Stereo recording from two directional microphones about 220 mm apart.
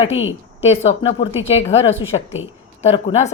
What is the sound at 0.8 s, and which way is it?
A woman's voice, 30° left (ahead or behind).